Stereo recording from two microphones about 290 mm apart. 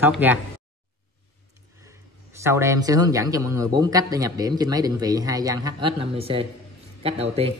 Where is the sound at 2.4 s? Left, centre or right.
Centre.